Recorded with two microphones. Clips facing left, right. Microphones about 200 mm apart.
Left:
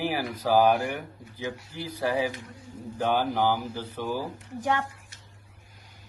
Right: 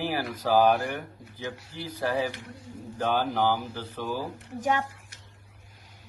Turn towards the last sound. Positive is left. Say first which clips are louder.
# right 1 dB
turn(degrees=-15)  # may be behind; listen again after turning